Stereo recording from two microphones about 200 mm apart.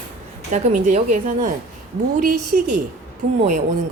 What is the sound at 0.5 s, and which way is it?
A woman's voice, 35° right (ahead or behind).